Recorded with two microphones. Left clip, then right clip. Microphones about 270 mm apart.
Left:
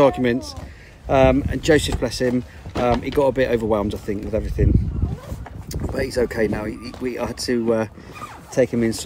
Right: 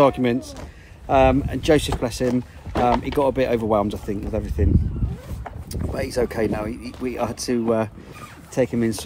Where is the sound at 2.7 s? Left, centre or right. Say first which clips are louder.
Right 1 dB; right.